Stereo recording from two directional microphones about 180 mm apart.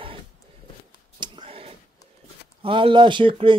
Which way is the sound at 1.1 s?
25° right (ahead or behind).